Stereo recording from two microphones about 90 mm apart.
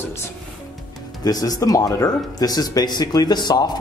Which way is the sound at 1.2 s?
45° left (ahead or behind).